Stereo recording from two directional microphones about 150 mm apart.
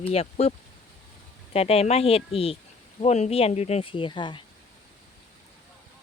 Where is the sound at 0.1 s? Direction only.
45° left (ahead or behind).